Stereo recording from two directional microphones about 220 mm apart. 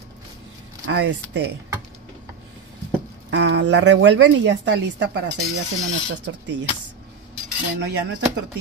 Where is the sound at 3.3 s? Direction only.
55° right (ahead or behind).